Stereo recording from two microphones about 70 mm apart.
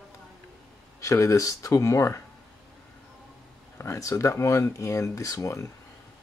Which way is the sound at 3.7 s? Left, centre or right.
Left.